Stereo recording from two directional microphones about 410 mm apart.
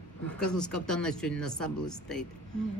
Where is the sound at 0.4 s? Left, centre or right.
Centre.